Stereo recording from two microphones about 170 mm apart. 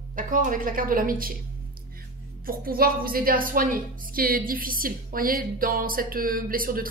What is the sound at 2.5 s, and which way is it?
A woman's voice, 60° right (ahead or behind).